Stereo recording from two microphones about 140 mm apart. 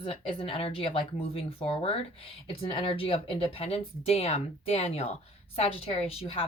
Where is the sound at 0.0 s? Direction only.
40° left (ahead or behind).